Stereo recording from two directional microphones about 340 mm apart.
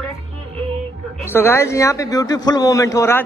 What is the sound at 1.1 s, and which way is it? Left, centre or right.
A man's voice, centre.